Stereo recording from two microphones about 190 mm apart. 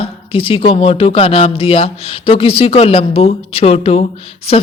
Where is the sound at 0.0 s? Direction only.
30° left (ahead or behind).